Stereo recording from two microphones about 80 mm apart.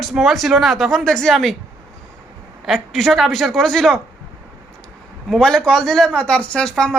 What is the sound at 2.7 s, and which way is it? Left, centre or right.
Speech, centre.